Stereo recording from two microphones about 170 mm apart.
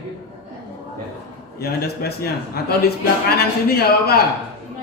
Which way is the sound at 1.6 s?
65° left (ahead or behind).